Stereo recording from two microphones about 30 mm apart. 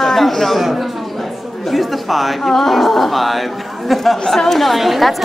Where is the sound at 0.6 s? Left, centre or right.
Centre.